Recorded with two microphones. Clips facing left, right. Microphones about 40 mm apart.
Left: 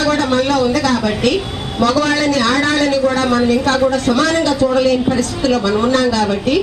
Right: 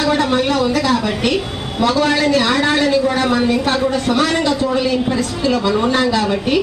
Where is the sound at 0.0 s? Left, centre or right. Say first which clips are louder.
Left 1 dB; centre.